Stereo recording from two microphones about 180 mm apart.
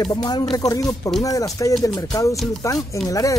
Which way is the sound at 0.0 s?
25° left (ahead or behind).